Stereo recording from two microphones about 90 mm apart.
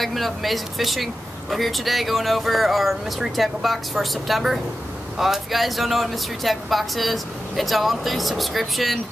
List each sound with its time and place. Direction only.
0.0 s speech: centre (ahead or behind)